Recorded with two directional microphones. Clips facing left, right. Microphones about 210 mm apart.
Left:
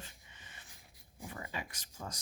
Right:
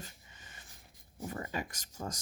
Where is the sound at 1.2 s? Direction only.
40° right (ahead or behind).